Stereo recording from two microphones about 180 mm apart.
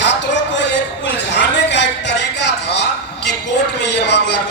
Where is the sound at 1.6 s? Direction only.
75° left (ahead or behind).